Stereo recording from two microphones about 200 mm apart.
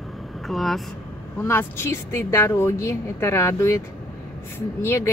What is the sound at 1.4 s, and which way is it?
A woman's voice, 10° left (ahead or behind).